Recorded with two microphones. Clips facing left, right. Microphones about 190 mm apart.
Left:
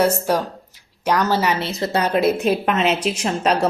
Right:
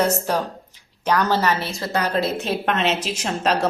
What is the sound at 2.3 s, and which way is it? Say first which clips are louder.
A woman's voice: left 4 dB; 5° left (ahead or behind).